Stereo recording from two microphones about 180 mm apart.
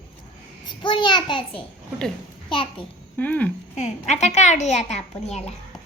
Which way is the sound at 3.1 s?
10° left (ahead or behind).